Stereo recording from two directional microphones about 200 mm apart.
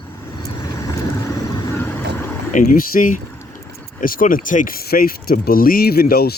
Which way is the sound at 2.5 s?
40° left (ahead or behind).